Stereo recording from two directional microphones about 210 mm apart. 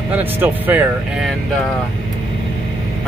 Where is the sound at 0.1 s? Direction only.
10° right (ahead or behind).